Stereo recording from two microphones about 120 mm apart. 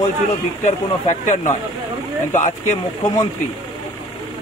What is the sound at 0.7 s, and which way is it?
Speech, 90° left.